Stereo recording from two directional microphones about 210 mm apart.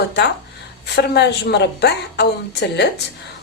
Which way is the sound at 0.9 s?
55° left (ahead or behind).